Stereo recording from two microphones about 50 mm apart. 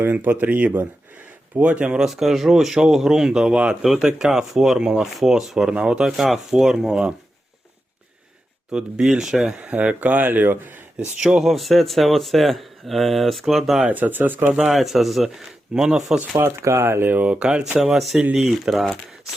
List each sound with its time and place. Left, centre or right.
0.0 s speech: right
2.0 s speech: centre
5.1 s speech: centre
6.1 s speech: centre
8.7 s speech: centre
9.6 s speech: right
11.2 s speech: centre
13.8 s speech: right
14.5 s speech: centre
16.4 s speech: right
16.8 s speech: right
17.1 s speech: right
17.4 s speech: centre